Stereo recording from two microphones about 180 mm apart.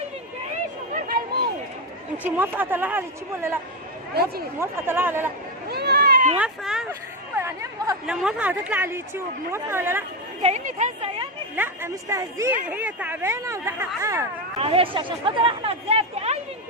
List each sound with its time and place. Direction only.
0.9 s a sound: 55° right (ahead or behind)
2.1 s speech: 10° right (ahead or behind)
4.1 s speech: 60° right (ahead or behind)
4.6 s speech: 10° right (ahead or behind)
5.6 s a sound: 65° right (ahead or behind)
6.3 s speech: 5° right (ahead or behind)
7.3 s speech: 15° right (ahead or behind)
8.0 s speech: 5° right (ahead or behind)
10.4 s speech: 40° right (ahead or behind)
11.5 s speech: 10° right (ahead or behind)
14.6 s speech: 30° right (ahead or behind)